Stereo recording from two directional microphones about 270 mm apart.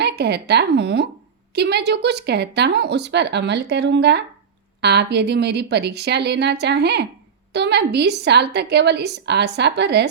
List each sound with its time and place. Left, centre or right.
0.0 s a woman's voice: right